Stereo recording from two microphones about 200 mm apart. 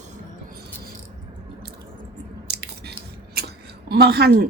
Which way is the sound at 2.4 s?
55° right (ahead or behind).